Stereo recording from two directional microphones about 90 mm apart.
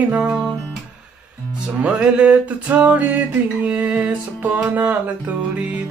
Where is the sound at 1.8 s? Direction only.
15° right (ahead or behind).